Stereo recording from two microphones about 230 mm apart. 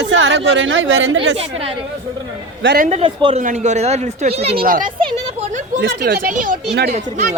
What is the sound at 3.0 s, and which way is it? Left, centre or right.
Speech, right.